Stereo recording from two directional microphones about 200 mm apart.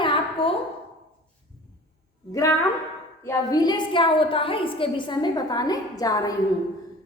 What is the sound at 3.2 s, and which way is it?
A woman's voice, 20° left (ahead or behind).